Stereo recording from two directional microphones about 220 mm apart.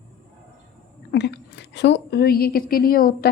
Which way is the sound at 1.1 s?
50° left (ahead or behind).